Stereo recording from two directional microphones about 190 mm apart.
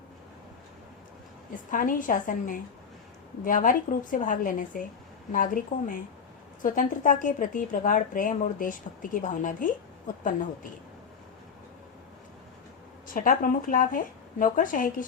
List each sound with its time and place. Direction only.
1.7 s a woman's voice: 45° left (ahead or behind)
13.1 s a woman's voice: 45° left (ahead or behind)